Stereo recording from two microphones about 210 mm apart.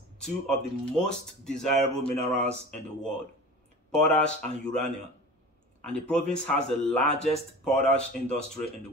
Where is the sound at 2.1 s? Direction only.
30° right (ahead or behind).